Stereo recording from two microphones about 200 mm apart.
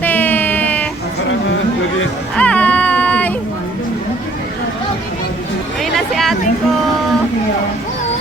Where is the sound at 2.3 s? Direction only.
5° left (ahead or behind).